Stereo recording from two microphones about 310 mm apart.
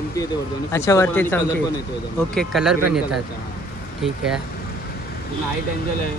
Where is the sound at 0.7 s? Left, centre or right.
Centre.